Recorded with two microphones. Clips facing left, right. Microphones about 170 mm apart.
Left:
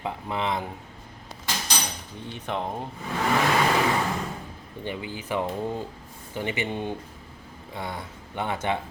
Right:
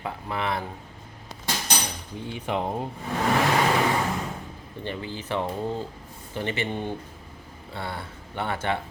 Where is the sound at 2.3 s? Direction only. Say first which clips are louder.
Right 3 dB; 10° right (ahead or behind).